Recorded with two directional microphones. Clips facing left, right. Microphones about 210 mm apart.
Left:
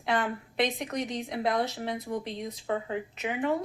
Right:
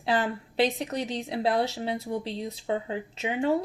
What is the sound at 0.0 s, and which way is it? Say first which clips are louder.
A woman's voice: right 2 dB; 30° right (ahead or behind).